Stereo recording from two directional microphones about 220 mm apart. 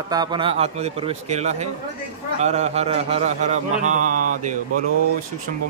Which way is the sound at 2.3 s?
30° right (ahead or behind).